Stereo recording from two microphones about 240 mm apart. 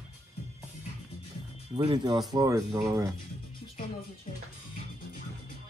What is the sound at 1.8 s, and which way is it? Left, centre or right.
Speech, centre.